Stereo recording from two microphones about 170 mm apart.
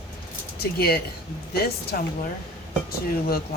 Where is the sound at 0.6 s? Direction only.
65° left (ahead or behind).